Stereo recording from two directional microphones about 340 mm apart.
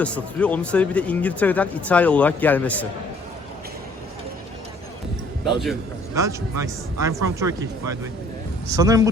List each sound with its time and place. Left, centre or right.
0.0 s speech: centre
5.5 s speech: centre